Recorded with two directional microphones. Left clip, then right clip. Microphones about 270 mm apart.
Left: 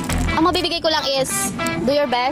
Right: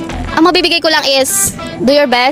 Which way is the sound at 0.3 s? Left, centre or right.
Right.